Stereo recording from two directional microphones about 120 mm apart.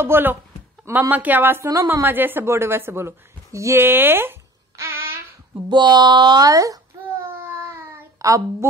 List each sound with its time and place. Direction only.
0.0 s speech: 20° right (ahead or behind)
5.7 s speech: 40° right (ahead or behind)
7.4 s a sound: 20° right (ahead or behind)